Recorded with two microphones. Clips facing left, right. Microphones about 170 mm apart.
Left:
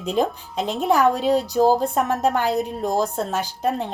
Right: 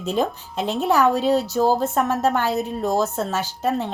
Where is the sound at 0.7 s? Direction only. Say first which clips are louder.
Even; 10° left (ahead or behind).